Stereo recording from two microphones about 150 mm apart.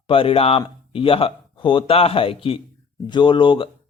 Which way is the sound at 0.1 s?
35° left (ahead or behind).